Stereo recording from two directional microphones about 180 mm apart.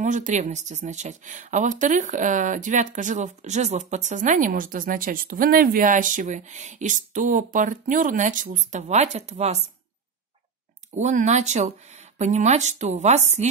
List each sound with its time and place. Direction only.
0.0 s speech: 45° right (ahead or behind)
11.0 s speech: 40° right (ahead or behind)